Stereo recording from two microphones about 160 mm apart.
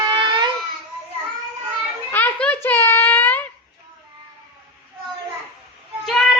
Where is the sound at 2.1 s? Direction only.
10° left (ahead or behind).